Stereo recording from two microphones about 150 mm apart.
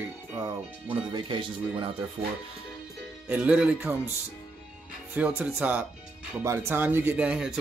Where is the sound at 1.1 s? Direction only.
35° right (ahead or behind).